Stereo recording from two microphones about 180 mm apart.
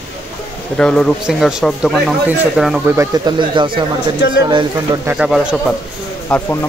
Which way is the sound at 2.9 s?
20° right (ahead or behind).